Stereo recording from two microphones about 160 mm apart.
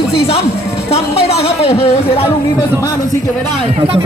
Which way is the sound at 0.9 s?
40° left (ahead or behind).